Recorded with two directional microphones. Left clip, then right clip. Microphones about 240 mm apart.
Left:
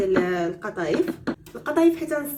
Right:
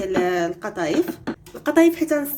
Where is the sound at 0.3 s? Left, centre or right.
Right.